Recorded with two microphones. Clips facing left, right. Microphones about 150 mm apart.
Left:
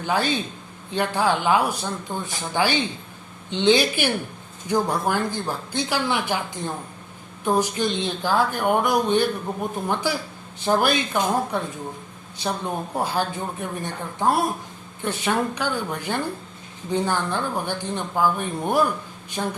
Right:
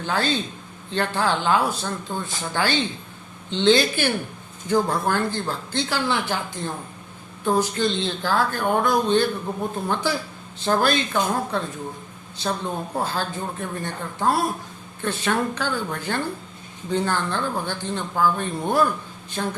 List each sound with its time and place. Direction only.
0.0 s speech: 15° left (ahead or behind)
7.4 s speech: 15° left (ahead or behind)